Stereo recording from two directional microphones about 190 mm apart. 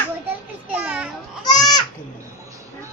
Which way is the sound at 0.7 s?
10° right (ahead or behind).